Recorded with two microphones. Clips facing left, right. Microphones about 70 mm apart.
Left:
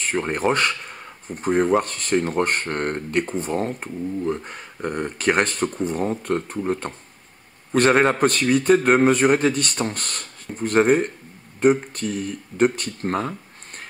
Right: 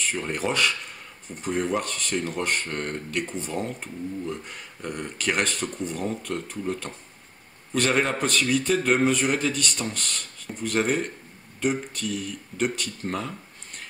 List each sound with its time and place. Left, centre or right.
0.0 s a man's voice: left